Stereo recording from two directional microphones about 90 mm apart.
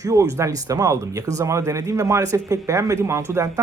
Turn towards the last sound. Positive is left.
turn(degrees=-35)  # may be behind; listen again after turning